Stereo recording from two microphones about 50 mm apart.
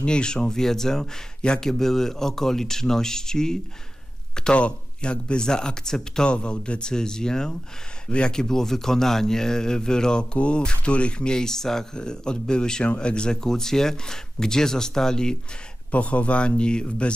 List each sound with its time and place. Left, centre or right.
0.0 s a man's voice: centre
4.6 s a man's voice: left
15.9 s speech: left